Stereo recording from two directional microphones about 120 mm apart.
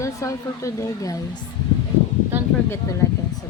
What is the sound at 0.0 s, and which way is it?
Speech, 25° left (ahead or behind).